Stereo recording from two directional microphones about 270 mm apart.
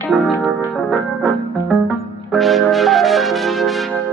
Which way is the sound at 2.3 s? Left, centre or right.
Centre.